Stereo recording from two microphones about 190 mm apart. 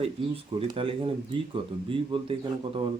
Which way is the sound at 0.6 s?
30° right (ahead or behind).